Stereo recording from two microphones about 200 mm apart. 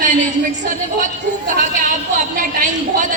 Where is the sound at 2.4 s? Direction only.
40° right (ahead or behind).